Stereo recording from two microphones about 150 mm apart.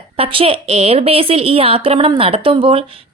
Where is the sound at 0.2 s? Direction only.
40° right (ahead or behind).